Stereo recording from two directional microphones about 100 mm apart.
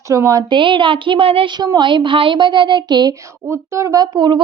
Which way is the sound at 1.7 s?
55° right (ahead or behind).